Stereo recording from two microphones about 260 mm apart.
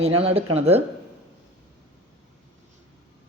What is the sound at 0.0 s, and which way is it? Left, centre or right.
Speech, right.